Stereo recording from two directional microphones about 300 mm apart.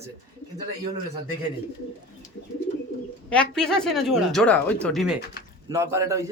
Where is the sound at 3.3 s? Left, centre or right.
Centre.